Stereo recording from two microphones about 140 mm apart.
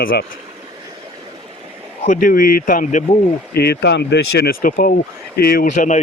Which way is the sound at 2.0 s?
85° left.